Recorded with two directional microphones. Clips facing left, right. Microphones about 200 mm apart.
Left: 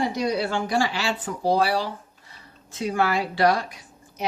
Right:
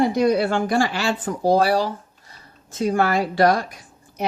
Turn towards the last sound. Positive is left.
turn(degrees=-50)  # may be behind; listen again after turning